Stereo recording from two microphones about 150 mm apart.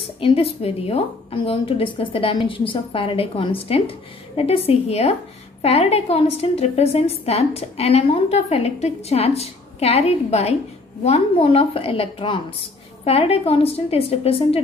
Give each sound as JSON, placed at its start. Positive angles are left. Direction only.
{"t": 0.0, "sound": "a woman's voice", "side_deg": 35}